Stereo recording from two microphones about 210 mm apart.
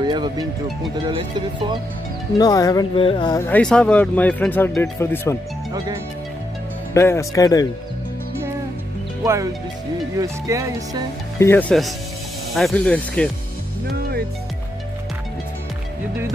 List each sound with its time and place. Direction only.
0.0 s speech: 20° right (ahead or behind)
2.3 s speech: 20° left (ahead or behind)
3.4 s speech: 5° left (ahead or behind)
6.9 s speech: 15° left (ahead or behind)
9.2 s music: 15° right (ahead or behind)
11.3 s speech: 10° left (ahead or behind)
13.8 s music: 50° right (ahead or behind)